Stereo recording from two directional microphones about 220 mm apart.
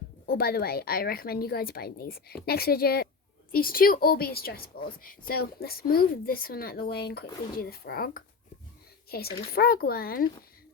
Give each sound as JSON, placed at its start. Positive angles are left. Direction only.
{"t": 0.3, "sound": "a woman's voice", "side_deg": 45}